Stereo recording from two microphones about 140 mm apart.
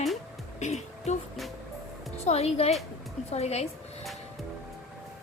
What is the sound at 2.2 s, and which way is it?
A woman's voice, 50° left (ahead or behind).